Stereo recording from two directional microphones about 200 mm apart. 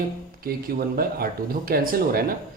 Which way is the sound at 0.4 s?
50° right (ahead or behind).